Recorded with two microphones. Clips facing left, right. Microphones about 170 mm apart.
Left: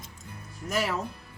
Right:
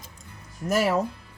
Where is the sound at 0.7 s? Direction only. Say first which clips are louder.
Right 6 dB; 45° right (ahead or behind).